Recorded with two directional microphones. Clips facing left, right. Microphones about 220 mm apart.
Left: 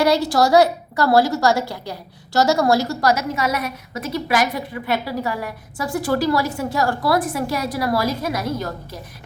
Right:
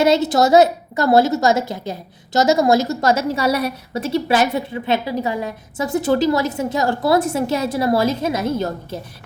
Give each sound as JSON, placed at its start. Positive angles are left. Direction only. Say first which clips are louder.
{"t": 0.0, "sound": "a woman's voice", "louder": "right 2 dB", "side_deg": -20}